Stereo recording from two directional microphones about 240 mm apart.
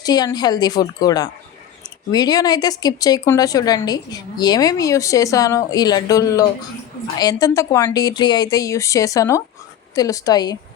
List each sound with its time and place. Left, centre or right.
0.0 s speech: centre